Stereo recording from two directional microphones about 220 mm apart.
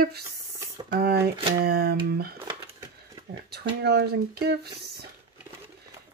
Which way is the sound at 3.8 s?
50° right (ahead or behind).